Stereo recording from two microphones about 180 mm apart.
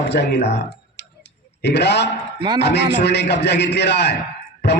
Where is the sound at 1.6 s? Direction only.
70° left (ahead or behind).